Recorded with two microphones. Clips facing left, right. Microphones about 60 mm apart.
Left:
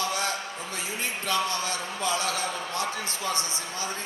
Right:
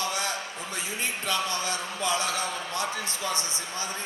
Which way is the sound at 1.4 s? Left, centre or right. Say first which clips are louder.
Even; right.